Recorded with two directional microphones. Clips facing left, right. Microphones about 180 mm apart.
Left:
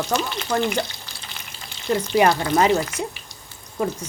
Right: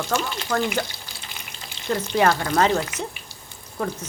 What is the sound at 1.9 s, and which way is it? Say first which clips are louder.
Speech: left 2 dB; 15° left (ahead or behind).